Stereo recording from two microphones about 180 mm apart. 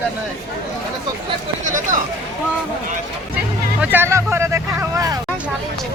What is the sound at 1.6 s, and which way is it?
Speech, 45° right (ahead or behind).